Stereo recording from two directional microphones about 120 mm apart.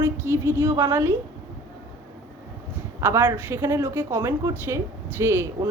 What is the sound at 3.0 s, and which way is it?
A woman's voice, 20° right (ahead or behind).